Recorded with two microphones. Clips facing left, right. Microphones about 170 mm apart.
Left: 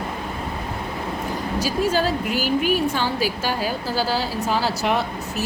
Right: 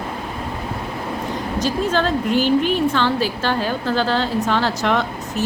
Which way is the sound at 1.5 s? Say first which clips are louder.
Right 1 dB; 10° left (ahead or behind).